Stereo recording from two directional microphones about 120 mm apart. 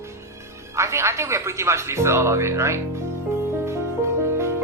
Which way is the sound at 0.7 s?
25° right (ahead or behind).